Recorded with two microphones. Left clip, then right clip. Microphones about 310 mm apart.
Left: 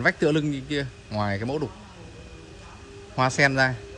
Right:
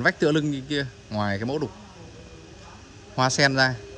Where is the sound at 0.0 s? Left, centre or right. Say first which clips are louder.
Even; centre.